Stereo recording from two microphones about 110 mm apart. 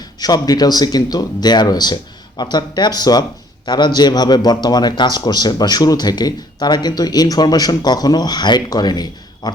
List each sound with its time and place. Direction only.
0.0 s a man's voice: 35° left (ahead or behind)